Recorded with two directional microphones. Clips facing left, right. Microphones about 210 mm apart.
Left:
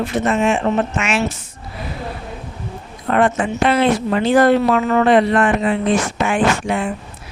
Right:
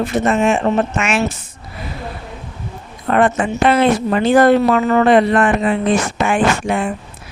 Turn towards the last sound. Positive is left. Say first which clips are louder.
# right 1 dB
turn(degrees=-50)  # may be behind; listen again after turning